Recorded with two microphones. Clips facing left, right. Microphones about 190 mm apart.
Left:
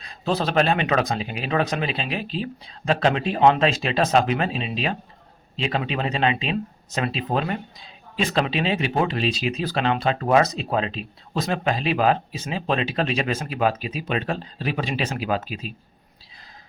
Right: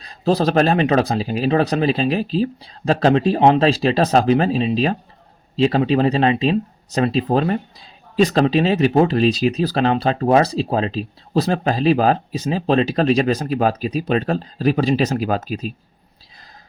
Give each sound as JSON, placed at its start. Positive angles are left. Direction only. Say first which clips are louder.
{"t": 0.0, "sound": "speech", "louder": "right 7 dB", "side_deg": -35}